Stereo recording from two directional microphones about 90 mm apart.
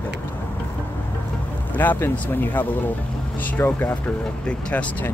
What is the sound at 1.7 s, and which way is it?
Speech, 20° left (ahead or behind).